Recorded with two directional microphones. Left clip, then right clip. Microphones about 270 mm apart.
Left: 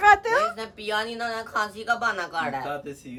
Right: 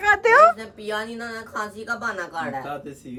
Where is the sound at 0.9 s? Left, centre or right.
Centre.